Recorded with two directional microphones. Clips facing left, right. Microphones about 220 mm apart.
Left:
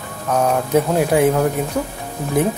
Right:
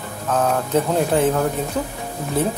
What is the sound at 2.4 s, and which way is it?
Speech, 15° left (ahead or behind).